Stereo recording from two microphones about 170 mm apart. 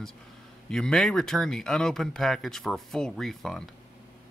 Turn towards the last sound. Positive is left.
turn(degrees=0)  # may be behind; listen again after turning